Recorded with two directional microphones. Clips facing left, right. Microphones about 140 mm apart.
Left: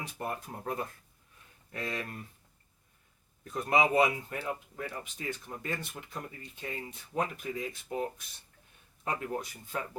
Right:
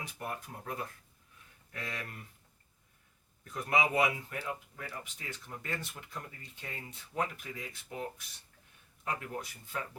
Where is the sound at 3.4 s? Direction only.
30° left (ahead or behind).